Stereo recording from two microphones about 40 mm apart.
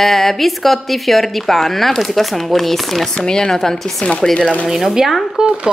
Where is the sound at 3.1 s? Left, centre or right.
Centre.